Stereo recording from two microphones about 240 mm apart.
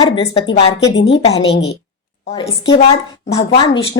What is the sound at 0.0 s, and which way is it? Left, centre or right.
Speech, left.